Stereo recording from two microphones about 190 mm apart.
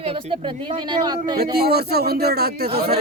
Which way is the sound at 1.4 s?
55° right (ahead or behind).